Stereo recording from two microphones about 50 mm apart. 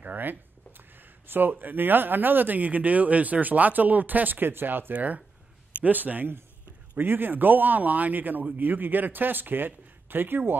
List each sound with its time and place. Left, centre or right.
0.0 s a sound: right
1.5 s speech: right
4.9 s speech: right